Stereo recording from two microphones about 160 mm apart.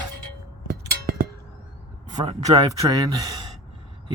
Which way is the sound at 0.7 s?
70° right (ahead or behind).